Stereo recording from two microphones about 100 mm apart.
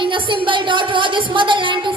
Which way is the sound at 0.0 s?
55° right (ahead or behind).